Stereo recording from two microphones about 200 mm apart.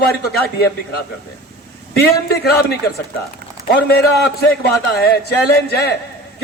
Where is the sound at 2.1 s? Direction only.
55° left (ahead or behind).